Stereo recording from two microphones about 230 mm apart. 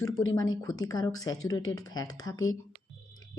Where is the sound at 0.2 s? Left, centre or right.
Left.